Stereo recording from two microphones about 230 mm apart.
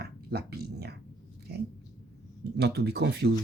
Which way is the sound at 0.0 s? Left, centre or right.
Right.